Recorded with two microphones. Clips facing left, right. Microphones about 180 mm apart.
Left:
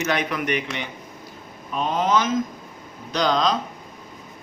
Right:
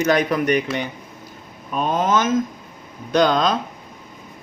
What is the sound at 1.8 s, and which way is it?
Speech, 50° right (ahead or behind).